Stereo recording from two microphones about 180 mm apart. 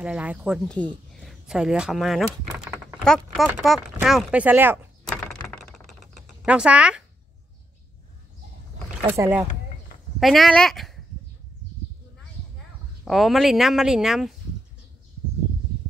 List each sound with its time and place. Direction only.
0.0 s speech: 5° right (ahead or behind)
0.7 s speech: 5° left (ahead or behind); by 4.7 s 10° right (ahead or behind)
5.0 s a sound: 5° left (ahead or behind)
5.5 s typing: centre (ahead or behind)
9.1 s speech: 15° right (ahead or behind)
10.2 s speech: centre (ahead or behind)
13.0 s speech: centre (ahead or behind)